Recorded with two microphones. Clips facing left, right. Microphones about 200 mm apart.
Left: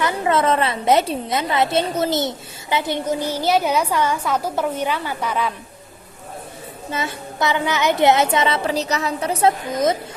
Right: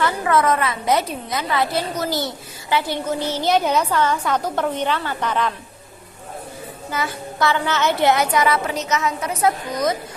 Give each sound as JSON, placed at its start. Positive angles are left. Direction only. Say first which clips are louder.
{"t": 0.0, "sound": "a woman's voice", "louder": "even", "side_deg": 25}
{"t": 6.9, "sound": "a woman's voice", "louder": "even", "side_deg": 25}